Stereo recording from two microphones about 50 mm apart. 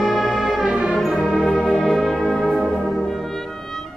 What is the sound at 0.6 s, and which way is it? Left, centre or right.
Music, centre.